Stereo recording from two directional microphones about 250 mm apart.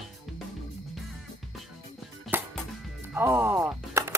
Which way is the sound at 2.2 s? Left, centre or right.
Centre.